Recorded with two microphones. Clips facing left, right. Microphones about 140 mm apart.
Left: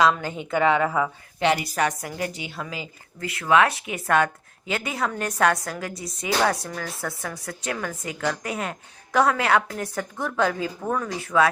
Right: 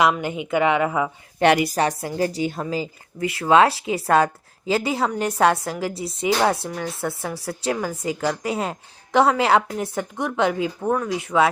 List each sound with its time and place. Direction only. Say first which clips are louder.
0.0 s a woman's voice: right 1 dB; 20° right (ahead or behind)
1.4 s a woman's voice: right 5 dB; 60° right (ahead or behind)
1.7 s a woman's voice: right 3 dB; 35° right (ahead or behind)